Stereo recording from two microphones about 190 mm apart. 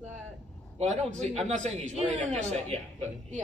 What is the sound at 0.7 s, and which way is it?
A man's voice, 35° right (ahead or behind).